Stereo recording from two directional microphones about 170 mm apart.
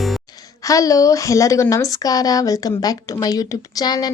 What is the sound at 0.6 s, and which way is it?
A woman's voice, 20° left (ahead or behind).